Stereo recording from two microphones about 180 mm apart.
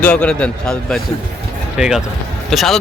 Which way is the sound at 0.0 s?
5° left (ahead or behind).